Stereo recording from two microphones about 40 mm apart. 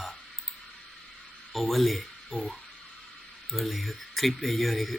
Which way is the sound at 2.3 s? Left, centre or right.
Left.